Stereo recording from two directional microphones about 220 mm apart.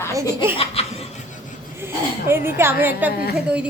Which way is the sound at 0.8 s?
25° left (ahead or behind).